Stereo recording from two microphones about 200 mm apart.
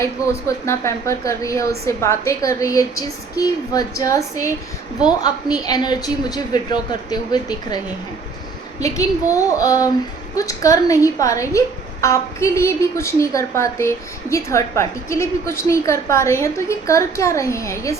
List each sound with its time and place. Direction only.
0.0 s a woman's voice: 15° left (ahead or behind)
8.8 s speech: 15° left (ahead or behind)